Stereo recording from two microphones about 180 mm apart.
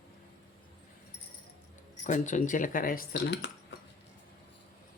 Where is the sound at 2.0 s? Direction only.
45° left (ahead or behind); by 3.5 s 70° left (ahead or behind).